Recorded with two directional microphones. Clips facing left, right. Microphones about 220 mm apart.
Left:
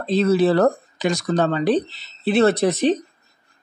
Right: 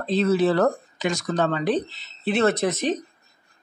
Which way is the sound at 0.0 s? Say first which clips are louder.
Left 3 dB; 35° left (ahead or behind).